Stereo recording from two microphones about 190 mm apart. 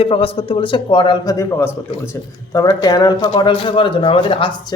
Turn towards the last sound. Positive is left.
turn(degrees=25)  # may be behind; listen again after turning